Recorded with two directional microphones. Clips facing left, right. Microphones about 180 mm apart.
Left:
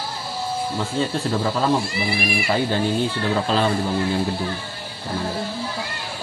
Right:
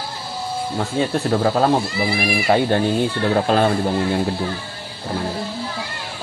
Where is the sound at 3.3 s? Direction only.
55° right (ahead or behind).